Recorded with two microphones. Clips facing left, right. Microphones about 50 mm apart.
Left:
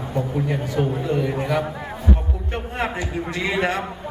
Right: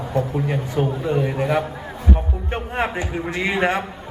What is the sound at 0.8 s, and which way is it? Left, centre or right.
Speech, right.